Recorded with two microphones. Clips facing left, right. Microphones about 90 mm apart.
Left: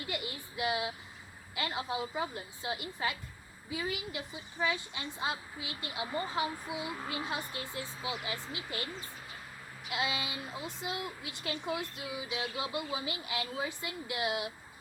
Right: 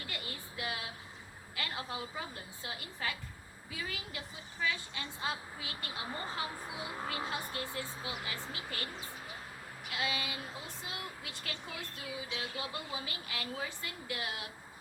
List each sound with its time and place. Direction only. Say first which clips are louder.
0.1 s a sound: left 5 dB; 20° left (ahead or behind)
1.5 s speech: left 5 dB; 20° left (ahead or behind)
9.9 s speech: left 2 dB; 20° left (ahead or behind)